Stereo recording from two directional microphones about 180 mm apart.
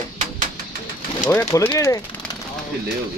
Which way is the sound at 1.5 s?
15° left (ahead or behind).